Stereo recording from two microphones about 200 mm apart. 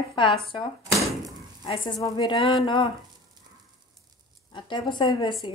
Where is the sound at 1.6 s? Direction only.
25° left (ahead or behind).